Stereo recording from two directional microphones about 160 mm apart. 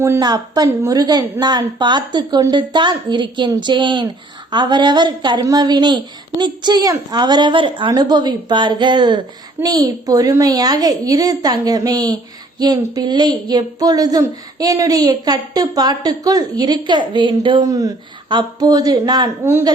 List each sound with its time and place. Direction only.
0.2 s a woman's voice: 25° right (ahead or behind)